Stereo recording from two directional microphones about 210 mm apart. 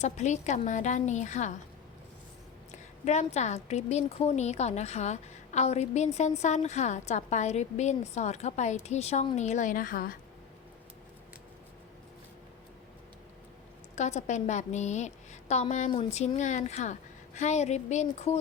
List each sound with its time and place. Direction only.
0.0 s a woman's voice: 35° left (ahead or behind)
3.0 s a woman's voice: 30° left (ahead or behind)
13.9 s a woman's voice: 35° left (ahead or behind)